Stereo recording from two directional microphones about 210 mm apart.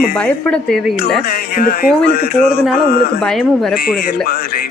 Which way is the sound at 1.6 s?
45° left (ahead or behind).